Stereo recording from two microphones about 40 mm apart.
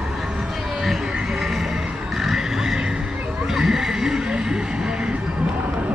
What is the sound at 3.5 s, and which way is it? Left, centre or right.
Vehicle, centre.